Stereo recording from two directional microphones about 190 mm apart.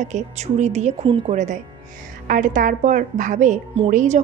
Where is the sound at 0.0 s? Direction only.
40° right (ahead or behind).